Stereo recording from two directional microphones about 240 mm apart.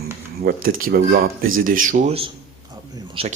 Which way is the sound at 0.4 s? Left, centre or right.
Right.